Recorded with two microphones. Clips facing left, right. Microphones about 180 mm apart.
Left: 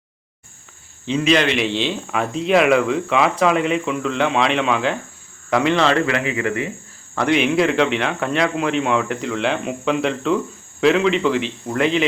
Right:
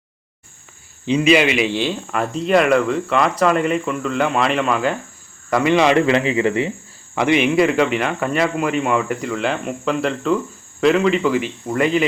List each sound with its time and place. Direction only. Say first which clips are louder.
1.0 s speech: right 3 dB; 10° right (ahead or behind)
5.7 s a man's voice: right 5 dB; 15° right (ahead or behind)
6.1 s speech: right 4 dB; 25° right (ahead or behind)
7.2 s speech: right 2 dB; 5° right (ahead or behind)